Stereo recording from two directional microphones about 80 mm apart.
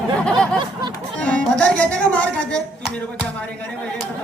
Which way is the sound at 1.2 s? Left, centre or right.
Centre.